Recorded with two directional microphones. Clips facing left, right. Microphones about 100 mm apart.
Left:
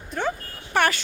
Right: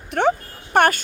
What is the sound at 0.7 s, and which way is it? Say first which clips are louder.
Speech: right 5 dB; 50° right (ahead or behind).